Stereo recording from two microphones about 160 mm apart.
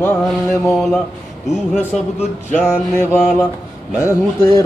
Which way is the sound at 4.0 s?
20° left (ahead or behind).